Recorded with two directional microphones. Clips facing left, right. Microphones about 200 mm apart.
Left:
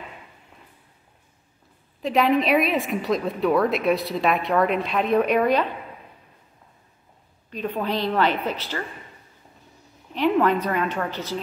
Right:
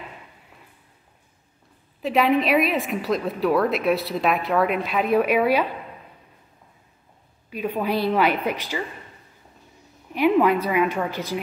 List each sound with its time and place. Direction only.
2.0 s a woman's voice: centre (ahead or behind)
7.4 s a woman's voice: 10° right (ahead or behind)
10.1 s a woman's voice: 10° right (ahead or behind)